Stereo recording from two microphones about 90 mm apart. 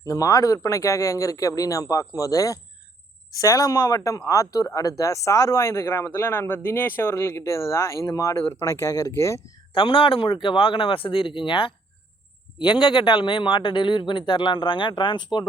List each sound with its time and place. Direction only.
0.0 s speech: 40° left (ahead or behind)
9.7 s speech: 75° left (ahead or behind)
12.8 s speech: 60° left (ahead or behind)